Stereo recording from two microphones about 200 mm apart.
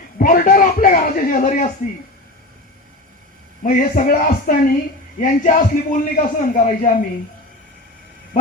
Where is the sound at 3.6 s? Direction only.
40° left (ahead or behind).